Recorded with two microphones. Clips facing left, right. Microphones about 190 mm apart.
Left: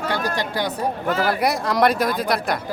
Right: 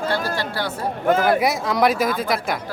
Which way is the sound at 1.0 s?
50° right (ahead or behind).